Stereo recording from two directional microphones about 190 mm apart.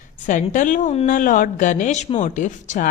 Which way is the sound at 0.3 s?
40° left (ahead or behind).